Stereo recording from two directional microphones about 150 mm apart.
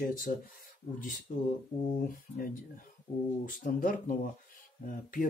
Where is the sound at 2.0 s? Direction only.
70° left (ahead or behind).